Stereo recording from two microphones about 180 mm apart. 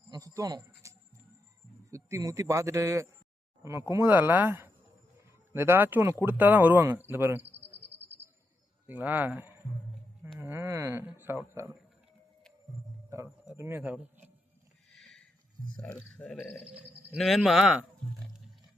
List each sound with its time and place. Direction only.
0.1 s speech: 20° right (ahead or behind)
0.8 s music: 15° right (ahead or behind)
1.9 s speech: 15° right (ahead or behind)
7.5 s cricket: 30° right (ahead or behind)
8.9 s speech: 10° right (ahead or behind)
10.4 s a sound: 15° right (ahead or behind)
13.1 s a sound: 15° right (ahead or behind)
13.6 s speech: 10° right (ahead or behind)
14.9 s a sound: 5° left (ahead or behind)
15.7 s speech: 5° left (ahead or behind)
16.6 s speech: 5° right (ahead or behind)